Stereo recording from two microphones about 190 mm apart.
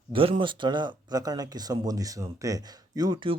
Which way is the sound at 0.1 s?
30° right (ahead or behind).